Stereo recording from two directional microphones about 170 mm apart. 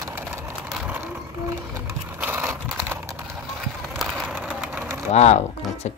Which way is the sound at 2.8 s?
15° right (ahead or behind).